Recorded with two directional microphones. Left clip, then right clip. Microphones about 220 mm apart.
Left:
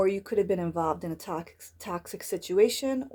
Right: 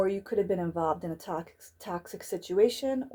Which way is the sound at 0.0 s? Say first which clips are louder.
Left 2 dB; 35° left (ahead or behind).